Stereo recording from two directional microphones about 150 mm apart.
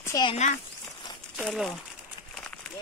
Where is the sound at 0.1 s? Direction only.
25° left (ahead or behind).